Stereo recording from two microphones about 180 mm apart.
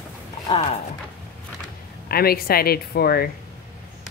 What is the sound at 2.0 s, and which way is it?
Speech, 60° left (ahead or behind).